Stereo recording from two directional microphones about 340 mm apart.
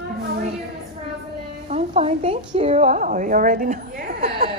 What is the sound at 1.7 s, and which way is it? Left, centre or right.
A woman's voice, centre.